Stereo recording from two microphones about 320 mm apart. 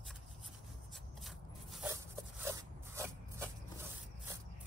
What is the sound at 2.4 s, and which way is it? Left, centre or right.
Dog, centre.